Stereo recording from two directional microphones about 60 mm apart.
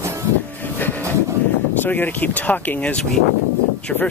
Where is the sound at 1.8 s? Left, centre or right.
Left.